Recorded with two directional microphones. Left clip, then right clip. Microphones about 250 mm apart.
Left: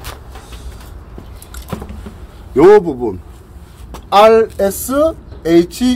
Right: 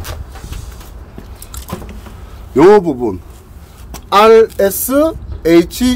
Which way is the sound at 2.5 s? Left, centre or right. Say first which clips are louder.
Even; right.